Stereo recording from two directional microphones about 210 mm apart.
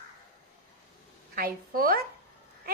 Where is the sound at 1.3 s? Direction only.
45° right (ahead or behind).